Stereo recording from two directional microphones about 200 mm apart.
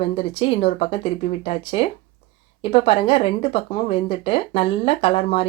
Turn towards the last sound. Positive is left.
turn(degrees=30)  # may be behind; listen again after turning